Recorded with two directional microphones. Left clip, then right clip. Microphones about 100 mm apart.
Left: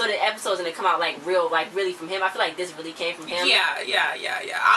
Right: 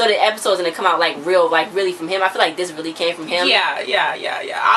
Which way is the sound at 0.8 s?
20° right (ahead or behind).